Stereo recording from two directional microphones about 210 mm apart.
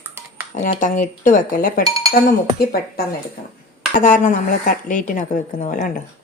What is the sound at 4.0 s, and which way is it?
Speech, 35° left (ahead or behind).